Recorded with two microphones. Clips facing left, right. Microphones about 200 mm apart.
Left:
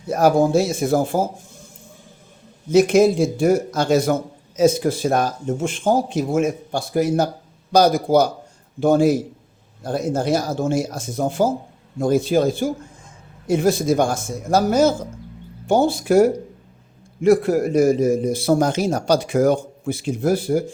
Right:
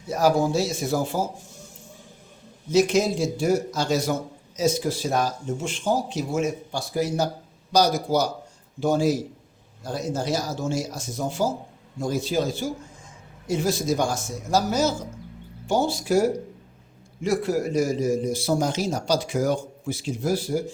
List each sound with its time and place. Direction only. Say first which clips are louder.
0.1 s a man's voice: left 5 dB; 55° left (ahead or behind)
2.7 s a man's voice: left 6 dB; 55° left (ahead or behind)